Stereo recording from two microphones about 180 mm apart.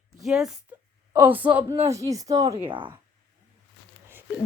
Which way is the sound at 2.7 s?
30° right (ahead or behind).